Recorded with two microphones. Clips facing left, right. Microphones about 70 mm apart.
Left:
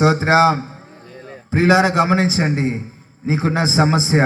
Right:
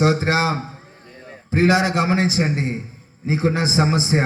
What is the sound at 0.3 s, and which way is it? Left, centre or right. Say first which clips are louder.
A man's voice: left 7 dB; left.